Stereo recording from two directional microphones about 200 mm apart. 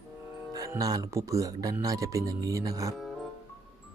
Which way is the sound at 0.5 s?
15° right (ahead or behind).